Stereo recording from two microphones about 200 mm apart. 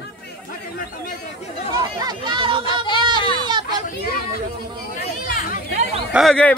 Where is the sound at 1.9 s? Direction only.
20° right (ahead or behind).